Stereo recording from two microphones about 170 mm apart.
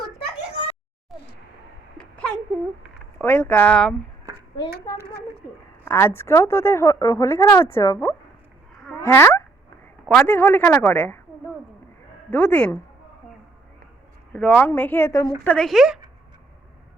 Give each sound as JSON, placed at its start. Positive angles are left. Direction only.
{"t": 2.0, "sound": "a sound", "side_deg": 5}
{"t": 3.2, "sound": "speech", "side_deg": 10}
{"t": 4.6, "sound": "a child's voice", "side_deg": 20}
{"t": 12.3, "sound": "speech", "side_deg": 10}
{"t": 14.3, "sound": "speech", "side_deg": 5}
{"t": 15.4, "sound": "a woman's voice", "side_deg": 5}